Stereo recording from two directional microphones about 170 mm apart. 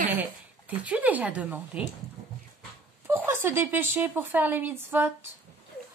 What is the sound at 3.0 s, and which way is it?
A woman's voice, 15° right (ahead or behind).